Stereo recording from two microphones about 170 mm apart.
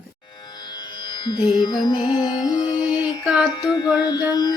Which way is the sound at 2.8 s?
5° right (ahead or behind).